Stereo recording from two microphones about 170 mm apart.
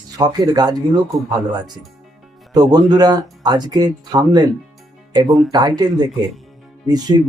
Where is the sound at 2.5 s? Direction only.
25° right (ahead or behind).